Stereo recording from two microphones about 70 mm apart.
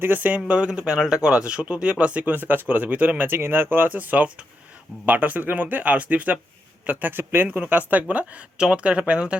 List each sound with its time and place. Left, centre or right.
0.0 s speech: right